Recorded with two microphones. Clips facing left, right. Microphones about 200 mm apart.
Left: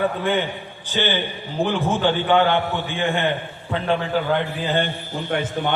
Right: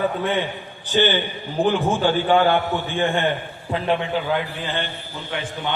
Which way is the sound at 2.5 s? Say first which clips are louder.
Right 1 dB; 15° left (ahead or behind).